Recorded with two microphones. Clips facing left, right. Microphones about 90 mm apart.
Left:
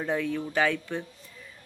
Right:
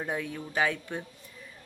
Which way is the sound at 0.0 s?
15° right (ahead or behind).